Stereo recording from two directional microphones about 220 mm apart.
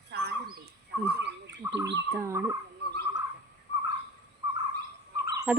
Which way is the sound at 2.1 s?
10° right (ahead or behind).